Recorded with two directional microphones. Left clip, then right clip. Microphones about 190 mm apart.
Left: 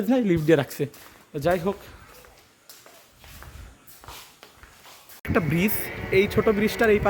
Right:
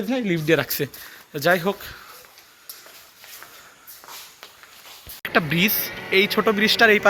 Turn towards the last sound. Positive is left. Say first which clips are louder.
# right 5 dB
turn(degrees=0)  # may be behind; listen again after turning